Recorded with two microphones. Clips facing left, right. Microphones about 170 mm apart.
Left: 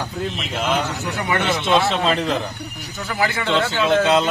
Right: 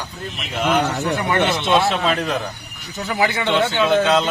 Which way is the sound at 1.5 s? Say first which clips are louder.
Right 1 dB; centre (ahead or behind).